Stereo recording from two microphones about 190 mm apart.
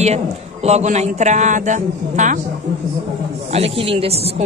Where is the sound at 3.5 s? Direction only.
30° right (ahead or behind).